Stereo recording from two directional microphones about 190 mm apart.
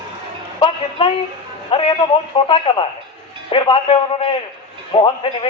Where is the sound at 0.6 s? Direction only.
30° left (ahead or behind).